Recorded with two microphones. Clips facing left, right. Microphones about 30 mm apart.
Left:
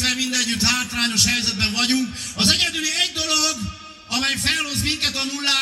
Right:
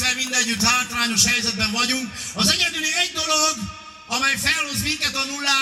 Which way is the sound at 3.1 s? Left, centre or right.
Left.